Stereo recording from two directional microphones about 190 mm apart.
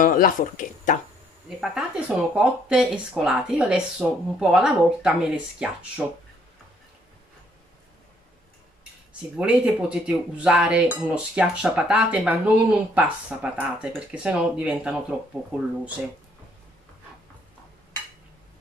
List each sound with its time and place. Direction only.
0.0 s speech: 45° left (ahead or behind)
1.6 s speech: centre (ahead or behind)
9.4 s speech: 5° right (ahead or behind)